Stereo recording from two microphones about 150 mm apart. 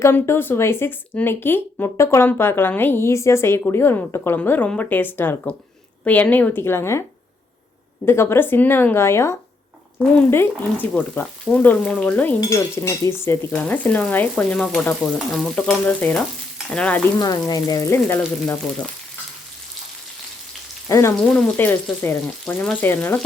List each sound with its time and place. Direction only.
0.0 s speech: 15° left (ahead or behind)
8.0 s speech: 15° left (ahead or behind)
17.2 s speech: 25° left (ahead or behind)
20.8 s frying: 20° left (ahead or behind)
21.3 s speech: 10° left (ahead or behind)